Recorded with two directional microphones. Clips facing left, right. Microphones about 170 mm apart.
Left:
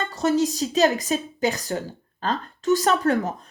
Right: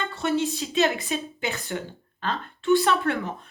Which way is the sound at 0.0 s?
40° left (ahead or behind).